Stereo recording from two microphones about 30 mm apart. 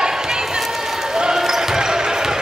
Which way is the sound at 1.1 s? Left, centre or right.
Right.